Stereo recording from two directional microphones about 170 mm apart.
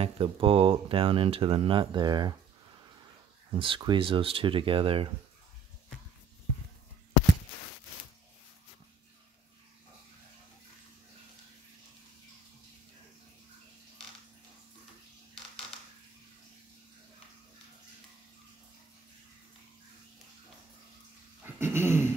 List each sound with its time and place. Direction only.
0.0 s speech: 30° right (ahead or behind)
3.5 s speech: 30° right (ahead or behind)
21.5 s dog: 15° right (ahead or behind)